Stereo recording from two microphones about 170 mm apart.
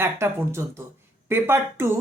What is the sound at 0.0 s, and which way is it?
Speech, 15° right (ahead or behind).